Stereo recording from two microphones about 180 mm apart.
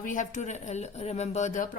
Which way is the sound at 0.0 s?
45° left (ahead or behind).